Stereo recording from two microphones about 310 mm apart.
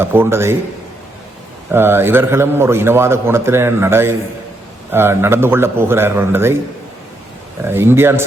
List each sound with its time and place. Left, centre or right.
0.0 s a man's voice: centre
1.7 s a man's voice: centre
7.6 s a man's voice: centre